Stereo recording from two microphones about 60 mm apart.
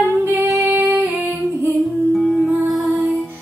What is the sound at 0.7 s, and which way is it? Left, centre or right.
Music, right.